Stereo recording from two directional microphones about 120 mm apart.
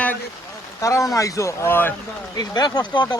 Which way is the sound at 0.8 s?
25° left (ahead or behind).